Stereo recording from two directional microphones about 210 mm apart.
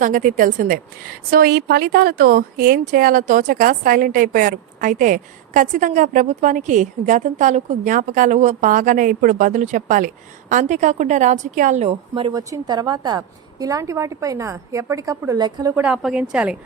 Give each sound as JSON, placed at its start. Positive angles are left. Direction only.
{"t": 0.0, "sound": "a woman's voice", "side_deg": -40}
{"t": 15.7, "sound": "a woman's voice", "side_deg": -5}